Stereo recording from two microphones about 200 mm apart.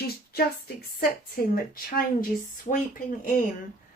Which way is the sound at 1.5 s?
45° left (ahead or behind).